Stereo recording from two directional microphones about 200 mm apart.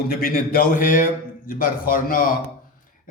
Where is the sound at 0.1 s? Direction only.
45° left (ahead or behind).